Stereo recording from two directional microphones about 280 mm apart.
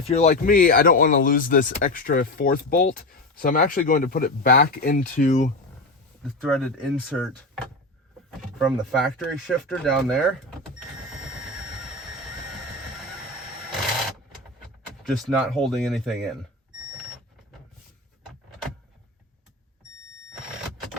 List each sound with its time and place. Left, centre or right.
0.1 s speech: left
6.4 s speech: centre
15.0 s speech: centre